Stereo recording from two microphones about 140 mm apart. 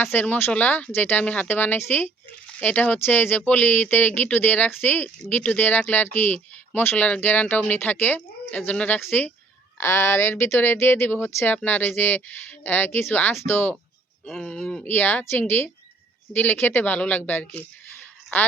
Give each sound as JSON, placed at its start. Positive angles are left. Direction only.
{"t": 0.0, "sound": "speech", "side_deg": 10}
{"t": 14.3, "sound": "speech", "side_deg": 5}